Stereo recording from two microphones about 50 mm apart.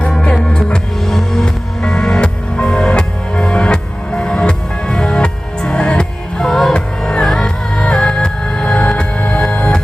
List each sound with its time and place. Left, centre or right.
0.0 s music: left